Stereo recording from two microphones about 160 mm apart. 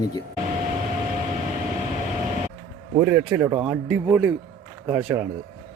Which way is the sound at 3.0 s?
10° right (ahead or behind).